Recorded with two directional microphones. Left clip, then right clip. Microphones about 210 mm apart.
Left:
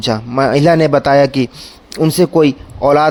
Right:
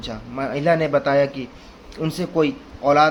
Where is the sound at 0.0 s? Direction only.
50° left (ahead or behind).